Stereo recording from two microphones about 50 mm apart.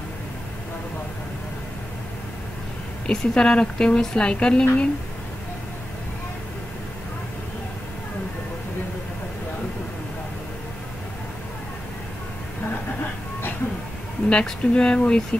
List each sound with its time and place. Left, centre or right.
3.1 s a woman's voice: centre
14.3 s a woman's voice: centre